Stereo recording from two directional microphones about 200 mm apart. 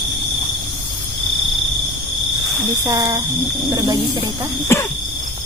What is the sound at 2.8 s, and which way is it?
Speech, 15° right (ahead or behind).